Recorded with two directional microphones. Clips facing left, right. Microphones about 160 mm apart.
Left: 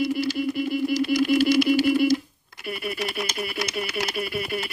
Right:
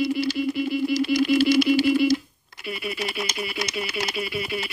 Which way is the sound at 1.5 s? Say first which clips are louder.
Right 1 dB; 10° left (ahead or behind).